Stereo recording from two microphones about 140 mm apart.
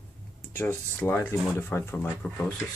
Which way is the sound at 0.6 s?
15° left (ahead or behind).